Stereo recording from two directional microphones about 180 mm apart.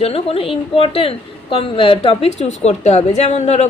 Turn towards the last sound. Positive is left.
turn(degrees=40)  # may be behind; listen again after turning